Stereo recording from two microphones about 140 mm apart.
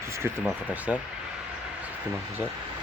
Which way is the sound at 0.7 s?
10° right (ahead or behind).